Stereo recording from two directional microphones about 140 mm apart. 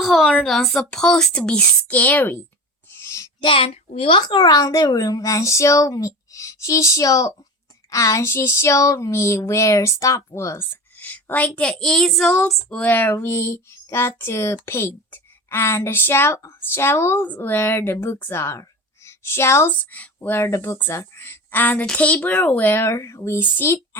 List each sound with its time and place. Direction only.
0.0 s speech: centre (ahead or behind)
2.9 s a sound: 20° left (ahead or behind)
3.4 s a child's voice: 40° left (ahead or behind); by 24.0 s 15° left (ahead or behind)